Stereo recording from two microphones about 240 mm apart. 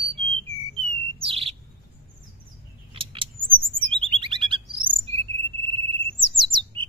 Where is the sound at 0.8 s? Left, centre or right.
Right.